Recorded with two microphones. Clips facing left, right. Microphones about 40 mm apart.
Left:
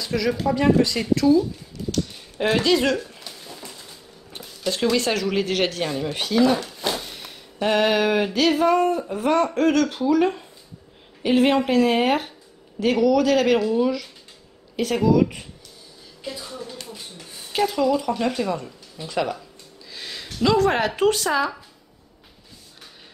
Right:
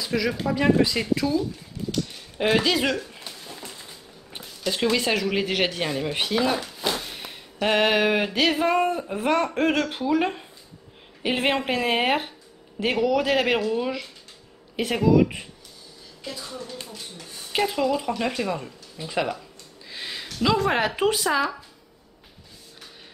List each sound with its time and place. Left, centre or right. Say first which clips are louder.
0.0 s speech: left 2 dB; centre
3.3 s a sound: even; centre
4.9 s speech: left 2 dB; centre
7.6 s a sound: left 1 dB; centre
10.0 s speech: left 3 dB; centre
11.2 s a sound: left 5 dB; centre
15.0 s speech: even; centre
16.3 s a woman's voice: left 2 dB; centre
16.8 s rub: left 1 dB; centre
17.5 s speech: left 3 dB; centre
19.9 s a sound: right 1 dB; centre
20.3 s speech: left 3 dB; centre